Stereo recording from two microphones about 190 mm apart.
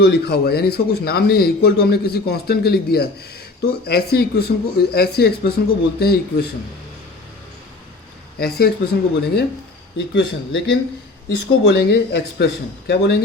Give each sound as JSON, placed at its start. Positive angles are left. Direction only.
{"t": 0.0, "sound": "a man's voice", "side_deg": 55}
{"t": 8.4, "sound": "a man's voice", "side_deg": 55}